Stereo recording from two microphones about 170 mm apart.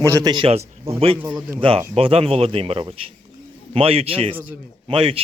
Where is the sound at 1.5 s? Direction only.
30° right (ahead or behind).